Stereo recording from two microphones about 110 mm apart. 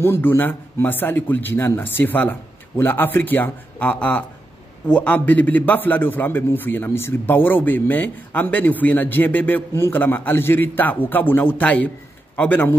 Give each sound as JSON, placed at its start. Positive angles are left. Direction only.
{"t": 0.0, "sound": "a man's voice", "side_deg": 20}